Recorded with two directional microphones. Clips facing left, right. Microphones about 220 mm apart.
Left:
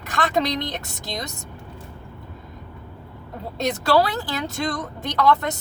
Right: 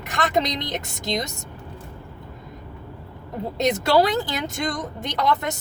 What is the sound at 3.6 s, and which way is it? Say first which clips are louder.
Speech: right 1 dB; 20° right (ahead or behind).